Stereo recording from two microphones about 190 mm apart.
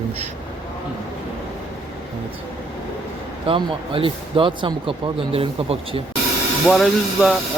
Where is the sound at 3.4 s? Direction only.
30° right (ahead or behind).